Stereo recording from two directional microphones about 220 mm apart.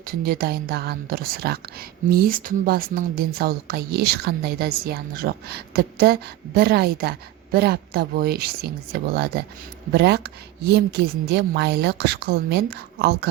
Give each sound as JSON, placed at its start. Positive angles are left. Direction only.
{"t": 0.0, "sound": "a woman's voice", "side_deg": -40}